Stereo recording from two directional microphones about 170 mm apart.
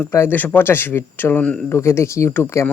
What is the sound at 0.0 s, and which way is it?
Speech, 15° left (ahead or behind).